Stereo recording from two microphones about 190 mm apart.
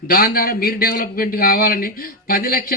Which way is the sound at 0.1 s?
55° left (ahead or behind).